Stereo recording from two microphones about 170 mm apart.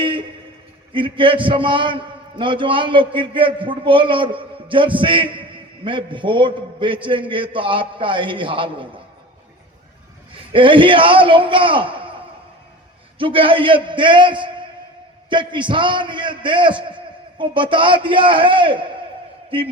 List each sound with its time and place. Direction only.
0.0 s a sound: 30° right (ahead or behind)
0.9 s a man's voice: 30° right (ahead or behind)
10.3 s a man's voice: 30° right (ahead or behind)